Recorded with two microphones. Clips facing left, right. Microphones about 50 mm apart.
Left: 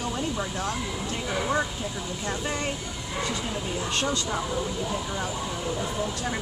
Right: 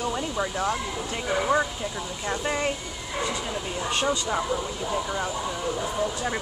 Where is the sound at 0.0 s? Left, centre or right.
Centre.